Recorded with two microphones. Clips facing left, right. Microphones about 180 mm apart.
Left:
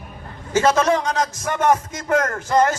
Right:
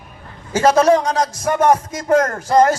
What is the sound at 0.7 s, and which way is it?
A man's voice, 35° right (ahead or behind).